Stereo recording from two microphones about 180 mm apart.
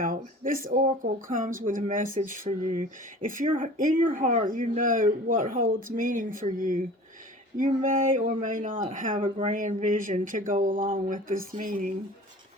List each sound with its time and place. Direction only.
0.0 s speech: 50° right (ahead or behind)